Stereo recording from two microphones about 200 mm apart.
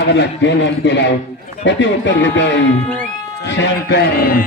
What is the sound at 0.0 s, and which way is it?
A man's voice, 60° left (ahead or behind).